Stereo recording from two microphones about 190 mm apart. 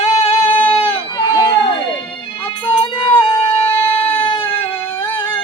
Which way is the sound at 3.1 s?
10° left (ahead or behind).